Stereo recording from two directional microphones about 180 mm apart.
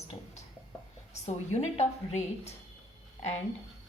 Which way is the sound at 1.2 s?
35° left (ahead or behind).